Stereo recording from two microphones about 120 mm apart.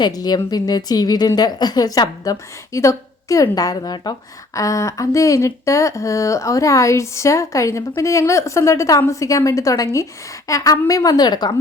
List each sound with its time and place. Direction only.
0.0 s a woman's voice: 35° left (ahead or behind)